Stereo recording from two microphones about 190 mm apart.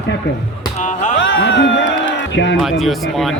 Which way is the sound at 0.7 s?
40° left (ahead or behind).